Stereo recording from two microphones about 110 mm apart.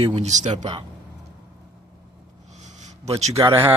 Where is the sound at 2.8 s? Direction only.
90° right.